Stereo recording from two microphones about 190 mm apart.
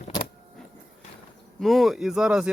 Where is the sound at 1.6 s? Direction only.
Centre (ahead or behind).